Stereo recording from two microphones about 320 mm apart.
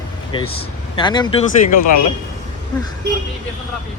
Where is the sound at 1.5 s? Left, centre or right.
Left.